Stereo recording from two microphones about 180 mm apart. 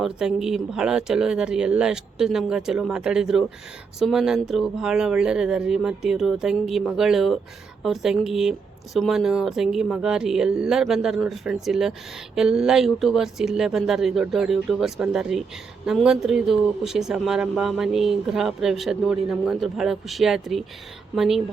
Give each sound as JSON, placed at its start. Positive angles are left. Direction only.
{"t": 0.0, "sound": "speech", "side_deg": -5}